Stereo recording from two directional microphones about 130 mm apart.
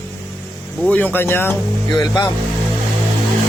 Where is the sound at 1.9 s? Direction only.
35° left (ahead or behind).